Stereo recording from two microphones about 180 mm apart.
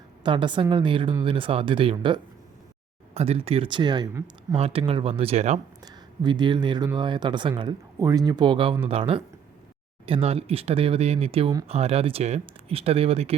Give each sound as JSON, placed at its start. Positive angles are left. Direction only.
{"t": 0.2, "sound": "speech", "side_deg": -25}
{"t": 4.5, "sound": "speech", "side_deg": -30}
{"t": 5.8, "sound": "speech", "side_deg": -25}